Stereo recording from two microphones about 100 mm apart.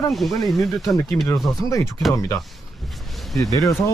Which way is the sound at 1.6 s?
30° left (ahead or behind).